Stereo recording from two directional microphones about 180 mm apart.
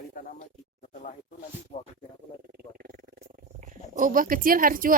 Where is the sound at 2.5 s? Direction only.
55° right (ahead or behind).